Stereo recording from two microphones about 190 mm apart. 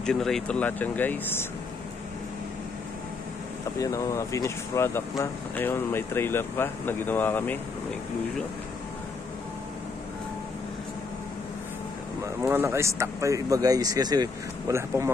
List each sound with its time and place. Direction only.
0.0 s speech: centre (ahead or behind)
3.8 s speech: 15° left (ahead or behind)
12.2 s speech: 10° right (ahead or behind)